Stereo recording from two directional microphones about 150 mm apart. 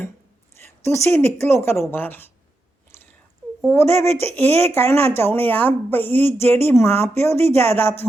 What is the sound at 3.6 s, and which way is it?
A woman's voice, 15° left (ahead or behind).